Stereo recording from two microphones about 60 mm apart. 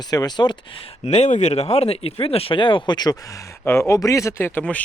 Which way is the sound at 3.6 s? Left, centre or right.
Left.